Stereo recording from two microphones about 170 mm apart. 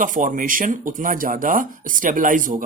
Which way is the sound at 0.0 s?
50° right (ahead or behind).